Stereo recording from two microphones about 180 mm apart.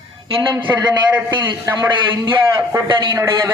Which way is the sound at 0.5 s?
20° right (ahead or behind).